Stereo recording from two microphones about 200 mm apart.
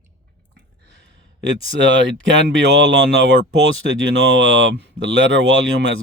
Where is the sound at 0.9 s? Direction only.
60° right (ahead or behind).